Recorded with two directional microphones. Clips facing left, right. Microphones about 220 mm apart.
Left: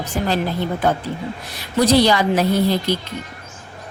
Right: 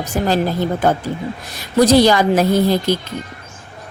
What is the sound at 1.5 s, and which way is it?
A woman's voice, 45° right (ahead or behind).